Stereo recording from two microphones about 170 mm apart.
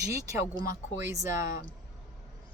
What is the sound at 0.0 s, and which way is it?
Speech, 15° right (ahead or behind).